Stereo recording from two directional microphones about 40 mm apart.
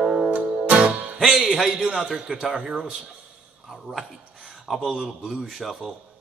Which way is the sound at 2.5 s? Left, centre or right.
Right.